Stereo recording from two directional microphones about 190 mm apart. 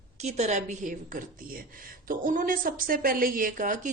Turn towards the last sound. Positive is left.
turn(degrees=-45)  # may be behind; listen again after turning